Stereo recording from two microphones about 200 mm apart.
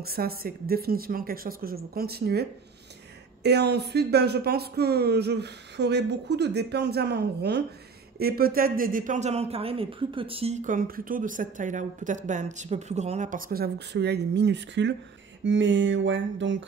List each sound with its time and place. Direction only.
0.0 s a woman's voice: 50° right (ahead or behind)
3.4 s speech: 55° right (ahead or behind)
15.4 s a sound: 65° right (ahead or behind)